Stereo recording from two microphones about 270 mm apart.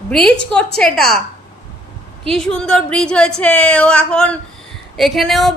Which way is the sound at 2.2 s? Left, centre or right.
Centre.